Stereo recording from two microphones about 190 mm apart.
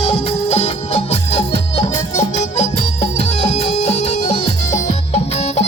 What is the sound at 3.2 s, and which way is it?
Music, 35° left (ahead or behind).